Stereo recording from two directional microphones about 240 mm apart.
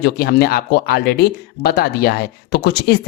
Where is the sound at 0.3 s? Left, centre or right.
Left.